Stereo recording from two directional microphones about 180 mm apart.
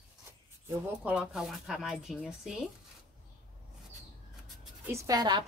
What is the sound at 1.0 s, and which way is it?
A woman's voice, 5° right (ahead or behind).